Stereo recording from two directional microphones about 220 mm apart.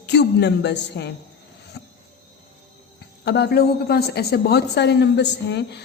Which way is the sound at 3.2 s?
50° left (ahead or behind).